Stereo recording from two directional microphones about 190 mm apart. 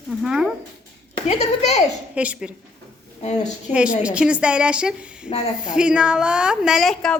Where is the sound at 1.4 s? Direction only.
35° left (ahead or behind).